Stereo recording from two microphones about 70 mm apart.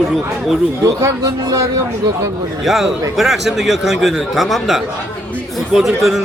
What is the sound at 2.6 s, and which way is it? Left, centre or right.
A man's voice, centre.